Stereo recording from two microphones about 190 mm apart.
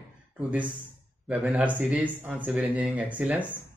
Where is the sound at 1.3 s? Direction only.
5° right (ahead or behind).